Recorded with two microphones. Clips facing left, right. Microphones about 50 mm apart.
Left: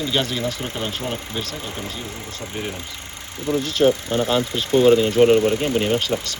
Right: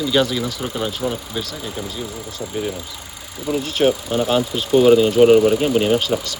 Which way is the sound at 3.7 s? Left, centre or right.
Right.